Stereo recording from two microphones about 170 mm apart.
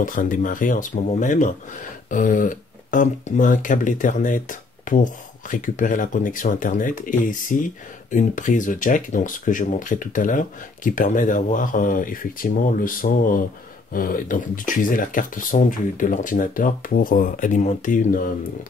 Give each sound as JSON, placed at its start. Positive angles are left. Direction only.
{"t": 0.0, "sound": "speech", "side_deg": 50}